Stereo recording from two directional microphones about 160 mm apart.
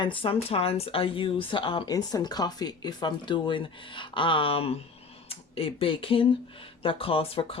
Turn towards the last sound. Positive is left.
turn(degrees=35)  # may be behind; listen again after turning